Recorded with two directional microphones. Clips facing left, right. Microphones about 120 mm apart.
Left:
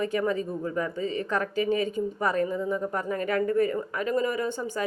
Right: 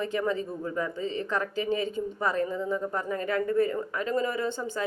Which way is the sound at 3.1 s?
25° right (ahead or behind).